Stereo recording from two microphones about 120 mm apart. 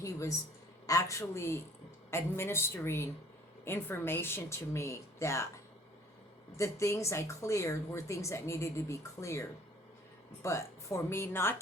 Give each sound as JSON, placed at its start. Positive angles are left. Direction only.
{"t": 0.0, "sound": "a sound", "side_deg": 25}
{"t": 0.9, "sound": "speech", "side_deg": 25}
{"t": 6.6, "sound": "speech", "side_deg": 25}